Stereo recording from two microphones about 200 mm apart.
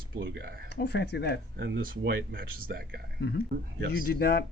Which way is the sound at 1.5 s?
55° right (ahead or behind).